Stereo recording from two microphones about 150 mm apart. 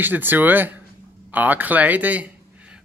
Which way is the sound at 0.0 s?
15° right (ahead or behind).